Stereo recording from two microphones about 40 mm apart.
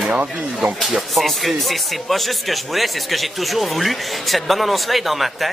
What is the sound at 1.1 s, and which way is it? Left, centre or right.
Speech, centre.